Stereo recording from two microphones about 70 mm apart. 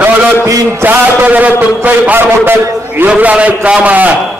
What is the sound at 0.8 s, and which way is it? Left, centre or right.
A man's voice, right.